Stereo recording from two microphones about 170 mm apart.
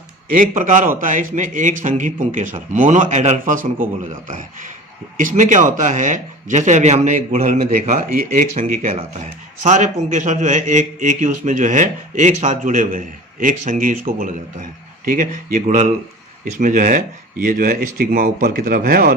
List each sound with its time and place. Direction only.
0.3 s a man's voice: 50° right (ahead or behind)